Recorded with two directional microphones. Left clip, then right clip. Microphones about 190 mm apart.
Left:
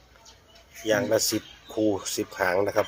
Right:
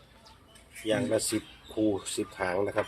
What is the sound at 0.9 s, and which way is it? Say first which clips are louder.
Speech: left 5 dB; 25° left (ahead or behind).